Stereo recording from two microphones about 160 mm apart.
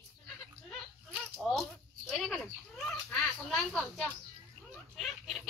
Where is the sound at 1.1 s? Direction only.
Centre (ahead or behind).